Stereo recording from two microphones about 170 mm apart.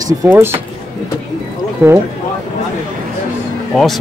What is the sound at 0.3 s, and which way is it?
Speech, 15° right (ahead or behind).